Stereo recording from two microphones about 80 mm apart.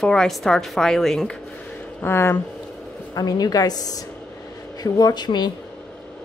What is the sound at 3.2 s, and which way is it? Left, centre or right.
A woman's voice, left.